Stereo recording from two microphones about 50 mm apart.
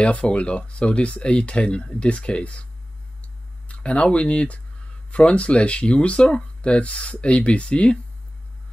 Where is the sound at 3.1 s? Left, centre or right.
Left.